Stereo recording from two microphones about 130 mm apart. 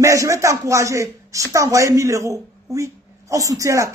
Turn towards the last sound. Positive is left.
turn(degrees=-25)  # may be behind; listen again after turning